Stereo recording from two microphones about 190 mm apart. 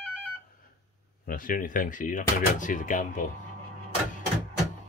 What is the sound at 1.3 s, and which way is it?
Speech, 45° left (ahead or behind).